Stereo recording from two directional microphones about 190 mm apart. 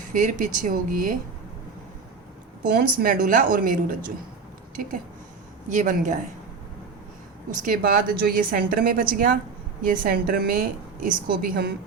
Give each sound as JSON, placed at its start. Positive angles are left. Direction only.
{"t": 0.1, "sound": "a woman's voice", "side_deg": -45}
{"t": 2.6, "sound": "a woman's voice", "side_deg": -50}
{"t": 5.6, "sound": "a woman's voice", "side_deg": -40}
{"t": 7.6, "sound": "a woman's voice", "side_deg": -50}